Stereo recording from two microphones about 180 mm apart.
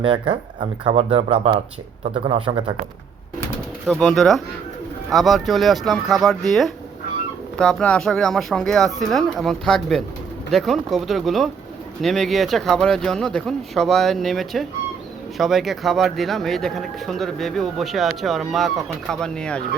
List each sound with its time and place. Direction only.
0.0 s speech: 30° right (ahead or behind)
3.8 s speech: centre (ahead or behind)